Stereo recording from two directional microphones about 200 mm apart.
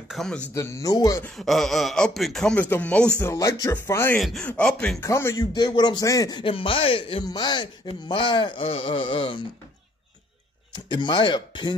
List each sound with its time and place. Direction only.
0.1 s speech: centre (ahead or behind)
0.6 s speech: 15° left (ahead or behind)
1.2 s a man's voice: centre (ahead or behind); by 9.4 s 25° left (ahead or behind)
10.7 s a man's voice: 20° left (ahead or behind)